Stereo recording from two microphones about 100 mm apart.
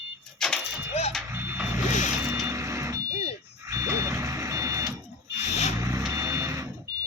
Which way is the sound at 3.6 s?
35° right (ahead or behind).